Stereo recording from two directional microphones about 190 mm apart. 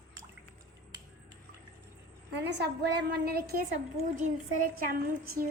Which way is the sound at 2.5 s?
60° right (ahead or behind).